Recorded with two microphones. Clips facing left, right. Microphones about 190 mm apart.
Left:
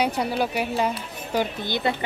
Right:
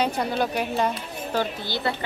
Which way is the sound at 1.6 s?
20° left (ahead or behind).